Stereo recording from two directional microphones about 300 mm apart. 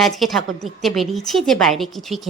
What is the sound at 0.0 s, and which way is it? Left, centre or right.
A woman's voice, centre.